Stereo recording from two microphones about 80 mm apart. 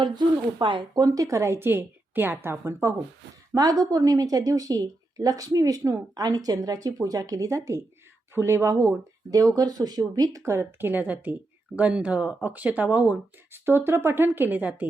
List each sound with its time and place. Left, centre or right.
0.0 s speech: right
0.9 s a woman's voice: right
3.5 s a woman's voice: right
10.4 s speech: right